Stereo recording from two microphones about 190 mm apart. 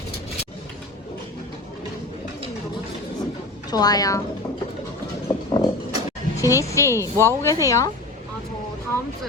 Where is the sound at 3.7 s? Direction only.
20° left (ahead or behind).